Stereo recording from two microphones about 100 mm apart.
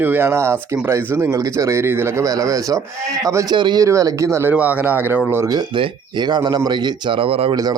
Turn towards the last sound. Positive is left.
turn(degrees=-65)  # may be behind; listen again after turning